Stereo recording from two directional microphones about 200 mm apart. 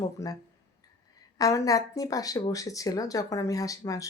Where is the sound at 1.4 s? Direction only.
15° left (ahead or behind).